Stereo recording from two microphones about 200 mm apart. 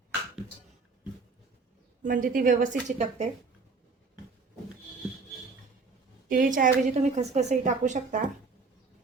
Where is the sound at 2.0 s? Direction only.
45° right (ahead or behind).